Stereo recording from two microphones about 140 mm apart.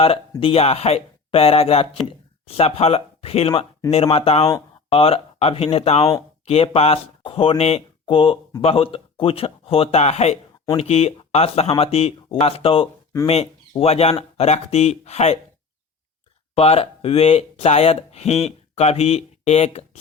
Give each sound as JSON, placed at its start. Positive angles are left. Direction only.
{"t": 0.0, "sound": "speech", "side_deg": 40}
{"t": 16.6, "sound": "speech", "side_deg": 45}